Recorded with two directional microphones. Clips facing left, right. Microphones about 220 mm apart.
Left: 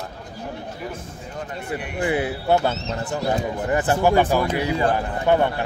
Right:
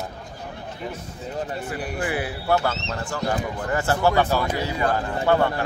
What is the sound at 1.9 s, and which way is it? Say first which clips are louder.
Speech: left 6 dB; 20° left (ahead or behind).